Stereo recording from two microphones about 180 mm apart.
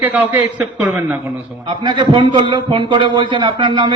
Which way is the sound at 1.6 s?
25° right (ahead or behind).